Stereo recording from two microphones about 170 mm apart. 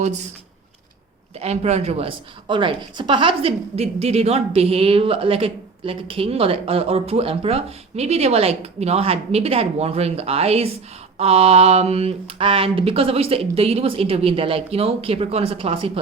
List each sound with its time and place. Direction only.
0.0 s speech: 40° right (ahead or behind)
1.4 s a woman's voice: 40° right (ahead or behind)